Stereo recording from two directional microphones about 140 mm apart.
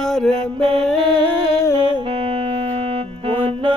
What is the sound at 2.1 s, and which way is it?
Music, 40° right (ahead or behind).